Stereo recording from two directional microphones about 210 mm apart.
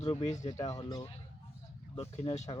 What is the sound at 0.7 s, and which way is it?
Speech, 15° left (ahead or behind).